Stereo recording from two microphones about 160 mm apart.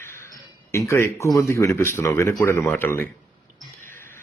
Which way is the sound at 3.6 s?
15° left (ahead or behind).